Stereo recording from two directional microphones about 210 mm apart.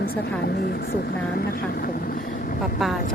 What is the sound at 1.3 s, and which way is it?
Vehicle, 45° left (ahead or behind).